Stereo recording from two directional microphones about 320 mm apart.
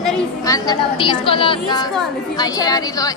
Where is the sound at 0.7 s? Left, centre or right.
Centre.